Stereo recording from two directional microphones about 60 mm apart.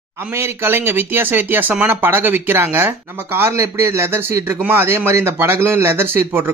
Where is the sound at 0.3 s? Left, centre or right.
Right.